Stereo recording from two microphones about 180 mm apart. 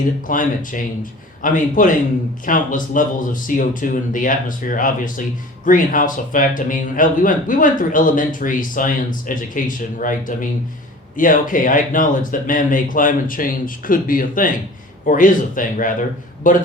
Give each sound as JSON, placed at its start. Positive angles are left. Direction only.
{"t": 0.3, "sound": "speech", "side_deg": 45}